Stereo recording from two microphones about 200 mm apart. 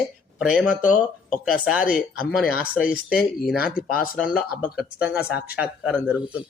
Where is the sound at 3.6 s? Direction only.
45° left (ahead or behind).